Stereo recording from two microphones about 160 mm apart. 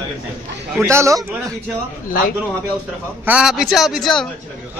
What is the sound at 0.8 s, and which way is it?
Speech, 20° right (ahead or behind).